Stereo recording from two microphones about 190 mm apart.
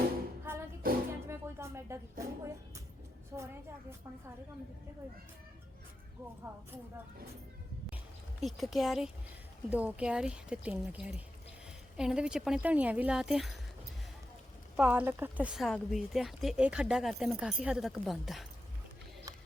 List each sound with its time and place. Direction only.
0.5 s music: 10° right (ahead or behind)
0.8 s music: 50° right (ahead or behind)
1.3 s a woman's voice: 15° right (ahead or behind)
8.4 s speech: centre (ahead or behind)
14.8 s speech: 5° right (ahead or behind)